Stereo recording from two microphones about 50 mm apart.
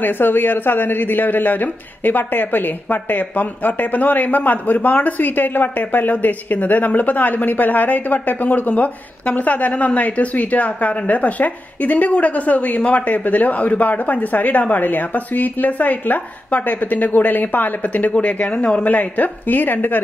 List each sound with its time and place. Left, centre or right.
0.0 s speech: left
18.9 s speech: left